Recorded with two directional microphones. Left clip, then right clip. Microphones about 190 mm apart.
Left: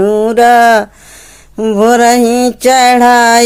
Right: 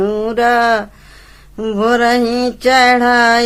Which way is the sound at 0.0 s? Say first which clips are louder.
Left 7 dB; 25° left (ahead or behind).